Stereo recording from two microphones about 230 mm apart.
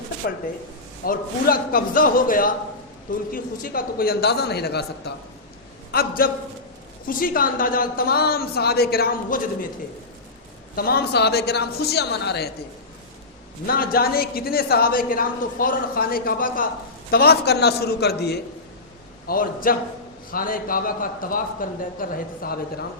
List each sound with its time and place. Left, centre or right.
0.2 s a woman's voice: left
10.8 s a man's voice: left
13.7 s a woman's voice: left